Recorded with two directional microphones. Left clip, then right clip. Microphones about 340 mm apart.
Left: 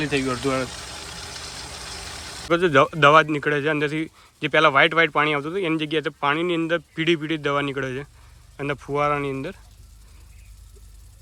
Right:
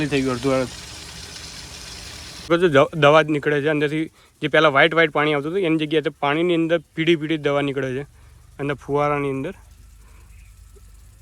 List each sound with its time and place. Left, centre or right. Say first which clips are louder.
0.1 s a man's voice: right 2 dB; centre
0.6 s vehicle: right 2 dB; left
2.5 s a man's voice: right 2 dB; centre